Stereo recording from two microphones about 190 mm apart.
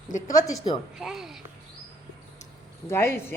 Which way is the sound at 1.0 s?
Centre (ahead or behind).